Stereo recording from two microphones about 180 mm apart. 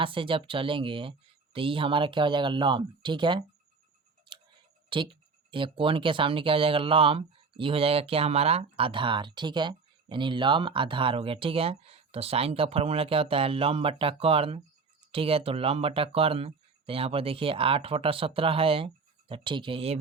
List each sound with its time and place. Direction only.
0.0 s speech: 30° right (ahead or behind)
4.3 s a sound: 25° right (ahead or behind)
4.9 s speech: 30° right (ahead or behind)